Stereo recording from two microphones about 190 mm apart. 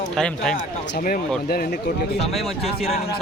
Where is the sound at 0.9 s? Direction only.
50° left (ahead or behind).